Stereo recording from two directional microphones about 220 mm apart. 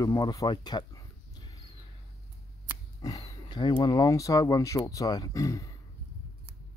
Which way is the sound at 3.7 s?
15° left (ahead or behind).